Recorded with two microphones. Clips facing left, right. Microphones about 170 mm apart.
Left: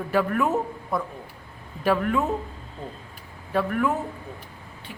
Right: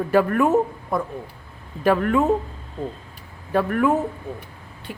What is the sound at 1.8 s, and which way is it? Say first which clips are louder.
Speech: right 4 dB; 50° right (ahead or behind).